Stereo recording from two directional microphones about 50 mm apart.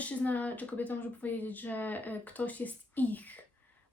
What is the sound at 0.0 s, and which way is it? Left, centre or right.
Speech, left.